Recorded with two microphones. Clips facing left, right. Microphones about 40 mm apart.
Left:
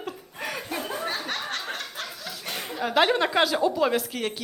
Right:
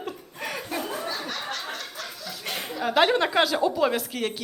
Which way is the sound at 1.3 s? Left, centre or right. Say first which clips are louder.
Left 1 dB; left.